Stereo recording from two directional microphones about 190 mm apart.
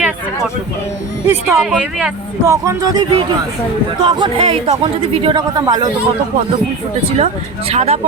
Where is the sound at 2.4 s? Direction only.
15° right (ahead or behind).